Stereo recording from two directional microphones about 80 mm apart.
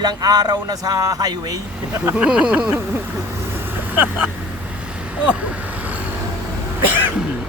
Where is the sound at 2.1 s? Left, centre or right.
Centre.